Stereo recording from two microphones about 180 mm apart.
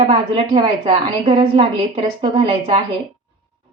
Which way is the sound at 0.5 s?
30° right (ahead or behind).